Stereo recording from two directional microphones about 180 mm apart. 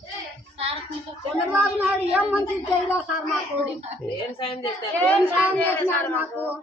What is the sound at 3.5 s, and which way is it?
Speech, 35° right (ahead or behind).